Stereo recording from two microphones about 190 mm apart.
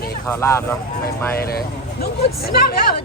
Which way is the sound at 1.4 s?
55° left (ahead or behind).